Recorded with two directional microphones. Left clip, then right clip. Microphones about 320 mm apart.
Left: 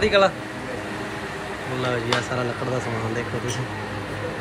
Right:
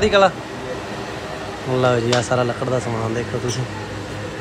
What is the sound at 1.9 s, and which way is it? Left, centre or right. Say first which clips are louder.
Speech: right 5 dB; centre.